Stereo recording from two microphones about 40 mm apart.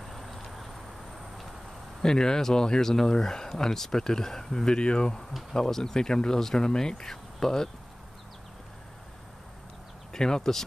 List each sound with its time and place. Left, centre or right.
0.0 s a sound: centre
2.0 s speech: centre
5.5 s speech: centre
10.1 s speech: centre